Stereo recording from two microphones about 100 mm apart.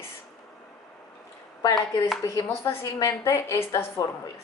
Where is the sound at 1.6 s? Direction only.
35° left (ahead or behind).